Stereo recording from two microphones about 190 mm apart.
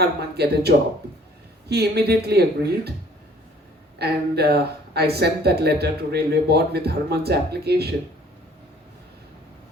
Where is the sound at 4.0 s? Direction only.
55° right (ahead or behind).